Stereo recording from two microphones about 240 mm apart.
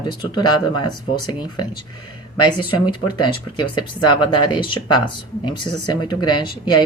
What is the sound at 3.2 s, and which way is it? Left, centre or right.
Speech, centre.